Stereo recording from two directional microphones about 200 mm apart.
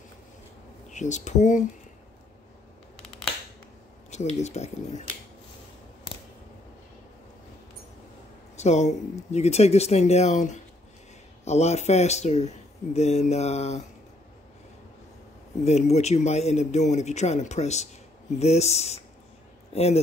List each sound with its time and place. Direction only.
0.8 s speech: 35° left (ahead or behind)
4.1 s speech: 35° left (ahead or behind)
8.5 s speech: 35° left (ahead or behind)
15.6 s speech: 35° left (ahead or behind)